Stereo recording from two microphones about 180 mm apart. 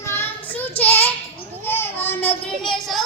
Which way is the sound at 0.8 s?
10° left (ahead or behind).